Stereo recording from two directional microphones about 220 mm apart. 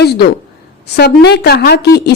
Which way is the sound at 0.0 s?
45° left (ahead or behind).